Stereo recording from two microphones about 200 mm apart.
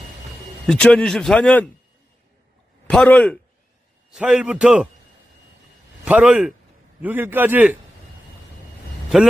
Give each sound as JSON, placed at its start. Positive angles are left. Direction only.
{"t": 0.7, "sound": "speech", "side_deg": 5}
{"t": 2.8, "sound": "speech", "side_deg": 5}
{"t": 6.1, "sound": "a man's voice", "side_deg": -5}